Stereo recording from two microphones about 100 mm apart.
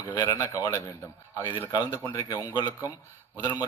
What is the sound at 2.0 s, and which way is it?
Speech, 35° left (ahead or behind).